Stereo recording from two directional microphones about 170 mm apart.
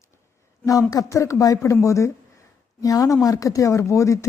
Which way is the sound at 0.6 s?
20° left (ahead or behind).